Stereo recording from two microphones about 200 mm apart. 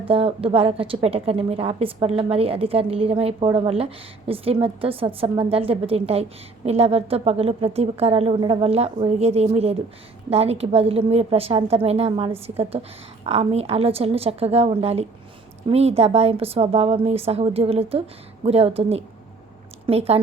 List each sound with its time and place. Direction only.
0.0 s a woman's voice: 30° right (ahead or behind)